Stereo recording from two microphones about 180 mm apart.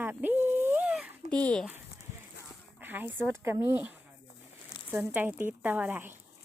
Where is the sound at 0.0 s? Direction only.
10° right (ahead or behind).